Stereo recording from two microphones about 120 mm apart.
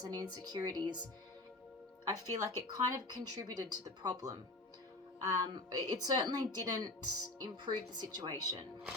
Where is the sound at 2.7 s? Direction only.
35° right (ahead or behind).